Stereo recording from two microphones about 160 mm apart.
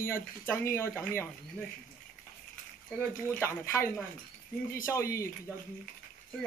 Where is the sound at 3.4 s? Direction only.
15° left (ahead or behind).